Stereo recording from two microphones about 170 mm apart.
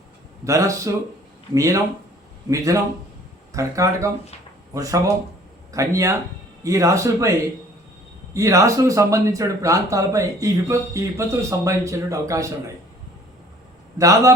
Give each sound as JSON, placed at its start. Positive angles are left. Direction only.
{"t": 0.4, "sound": "speech", "side_deg": -20}
{"t": 14.0, "sound": "speech", "side_deg": -20}